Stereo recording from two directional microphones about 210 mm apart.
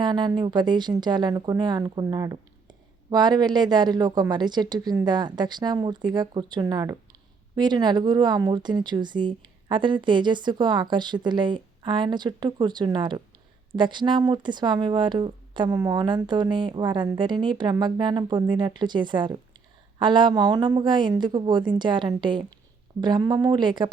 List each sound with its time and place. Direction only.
0.0 s speech: 20° right (ahead or behind)